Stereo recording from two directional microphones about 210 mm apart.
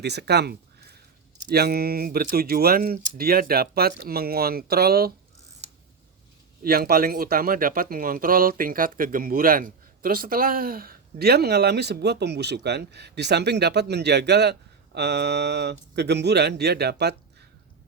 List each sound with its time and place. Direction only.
0.0 s speech: 50° right (ahead or behind)
6.6 s speech: 45° right (ahead or behind)